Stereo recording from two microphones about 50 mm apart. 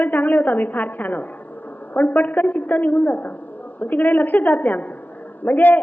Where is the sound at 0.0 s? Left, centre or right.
Left.